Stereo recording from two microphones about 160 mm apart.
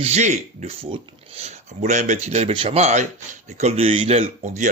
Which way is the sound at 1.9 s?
50° right (ahead or behind).